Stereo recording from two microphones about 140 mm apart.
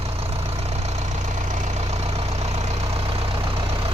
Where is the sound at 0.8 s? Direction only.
60° right (ahead or behind); by 3.5 s 45° right (ahead or behind).